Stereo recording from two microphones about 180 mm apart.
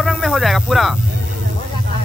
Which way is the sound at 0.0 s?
Centre (ahead or behind).